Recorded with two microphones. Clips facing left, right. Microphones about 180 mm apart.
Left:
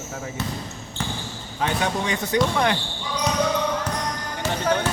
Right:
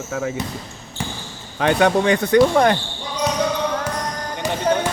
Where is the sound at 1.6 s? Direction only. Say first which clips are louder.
Right 8 dB; 70° right (ahead or behind); by 2.8 s 45° right (ahead or behind).